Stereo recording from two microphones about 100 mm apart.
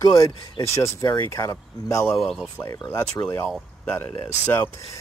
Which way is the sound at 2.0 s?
Centre (ahead or behind).